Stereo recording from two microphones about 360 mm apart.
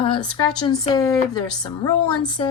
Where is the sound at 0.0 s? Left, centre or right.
Centre.